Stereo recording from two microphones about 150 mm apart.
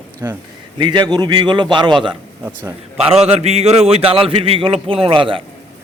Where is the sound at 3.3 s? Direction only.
45° right (ahead or behind).